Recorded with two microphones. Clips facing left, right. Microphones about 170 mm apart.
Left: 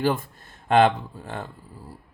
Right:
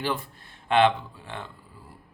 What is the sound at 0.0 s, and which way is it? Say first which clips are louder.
Speech: left 6 dB; 45° left (ahead or behind).